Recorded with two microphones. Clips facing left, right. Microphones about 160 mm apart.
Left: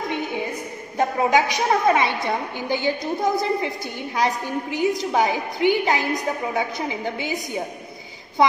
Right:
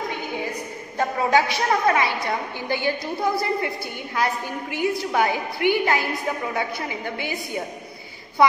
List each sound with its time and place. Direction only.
0.9 s a woman's voice: 15° left (ahead or behind)
4.7 s a woman's voice: 20° left (ahead or behind)